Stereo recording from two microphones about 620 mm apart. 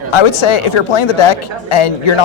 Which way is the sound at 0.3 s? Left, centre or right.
Left.